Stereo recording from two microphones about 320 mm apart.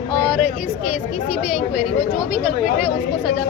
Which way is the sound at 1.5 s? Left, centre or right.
Centre.